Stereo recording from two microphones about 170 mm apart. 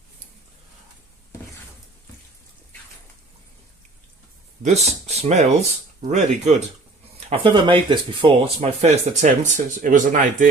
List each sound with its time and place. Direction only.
4.6 s speech: 40° right (ahead or behind)
7.3 s speech: 30° right (ahead or behind); by 10.2 s 50° right (ahead or behind)